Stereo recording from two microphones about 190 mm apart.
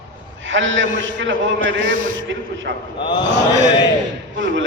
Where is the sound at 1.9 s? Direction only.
45° right (ahead or behind).